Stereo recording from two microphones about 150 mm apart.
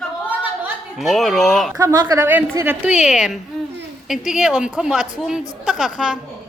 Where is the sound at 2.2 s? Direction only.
15° right (ahead or behind).